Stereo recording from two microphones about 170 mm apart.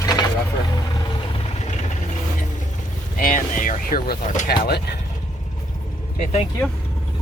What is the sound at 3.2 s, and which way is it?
Speech, 55° left (ahead or behind).